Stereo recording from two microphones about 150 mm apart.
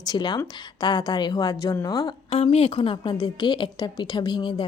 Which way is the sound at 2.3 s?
40° left (ahead or behind).